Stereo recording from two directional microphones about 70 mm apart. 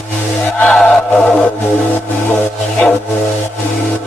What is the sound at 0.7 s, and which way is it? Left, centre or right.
Chant, centre.